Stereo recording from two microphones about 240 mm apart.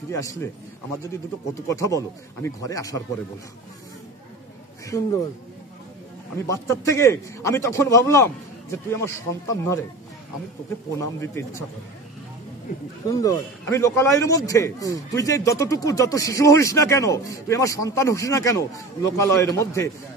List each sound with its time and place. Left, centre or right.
0.1 s speech: centre
4.8 s speech: centre
6.3 s speech: centre
11.0 s speech: centre
13.2 s speech: centre